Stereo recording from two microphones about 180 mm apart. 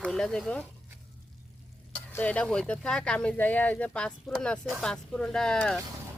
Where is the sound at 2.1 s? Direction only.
10° left (ahead or behind).